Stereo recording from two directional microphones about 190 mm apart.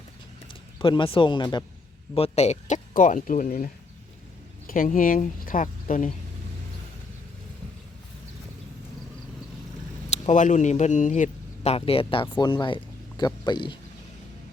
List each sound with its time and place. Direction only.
0.8 s speech: 25° left (ahead or behind); by 6.1 s 45° left (ahead or behind)
10.1 s speech: 40° left (ahead or behind); by 13.7 s 25° left (ahead or behind)